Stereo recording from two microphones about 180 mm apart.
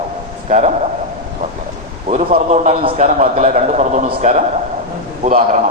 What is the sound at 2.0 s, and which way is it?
A man's voice, 35° right (ahead or behind).